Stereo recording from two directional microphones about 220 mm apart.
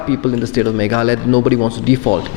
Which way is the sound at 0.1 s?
15° left (ahead or behind).